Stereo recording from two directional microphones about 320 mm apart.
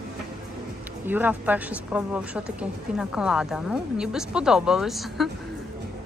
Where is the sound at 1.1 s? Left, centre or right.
Centre.